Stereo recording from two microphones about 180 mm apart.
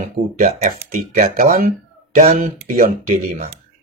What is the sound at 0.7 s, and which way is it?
Speech, 50° right (ahead or behind).